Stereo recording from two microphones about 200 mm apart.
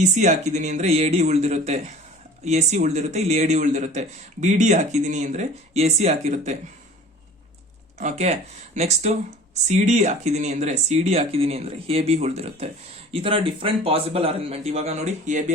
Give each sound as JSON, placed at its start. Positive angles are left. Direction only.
{"t": 0.0, "sound": "a man's voice", "side_deg": -35}
{"t": 7.9, "sound": "a man's voice", "side_deg": -35}